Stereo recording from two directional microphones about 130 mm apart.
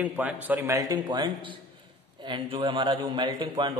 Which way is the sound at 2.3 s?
40° right (ahead or behind).